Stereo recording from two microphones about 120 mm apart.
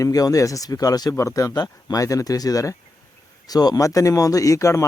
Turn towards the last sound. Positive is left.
turn(degrees=25)  # may be behind; listen again after turning